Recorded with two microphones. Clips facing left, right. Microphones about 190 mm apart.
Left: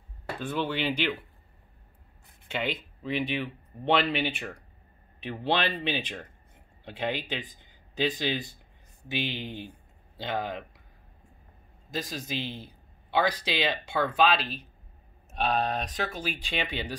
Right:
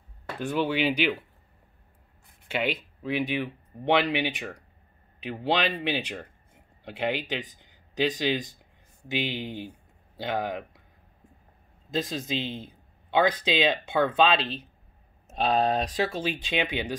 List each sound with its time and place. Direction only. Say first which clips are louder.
0.4 s speech: right 4 dB; 10° right (ahead or behind)
2.4 s speech: right 3 dB; 10° right (ahead or behind)
11.9 s a man's voice: right 5 dB; 25° right (ahead or behind)
16.4 s speech: right 4 dB; 15° right (ahead or behind)